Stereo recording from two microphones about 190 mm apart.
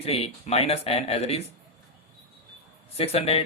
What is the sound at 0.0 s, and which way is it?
Speech, 30° left (ahead or behind).